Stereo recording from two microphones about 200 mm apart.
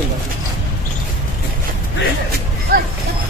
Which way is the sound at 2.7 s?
50° right (ahead or behind).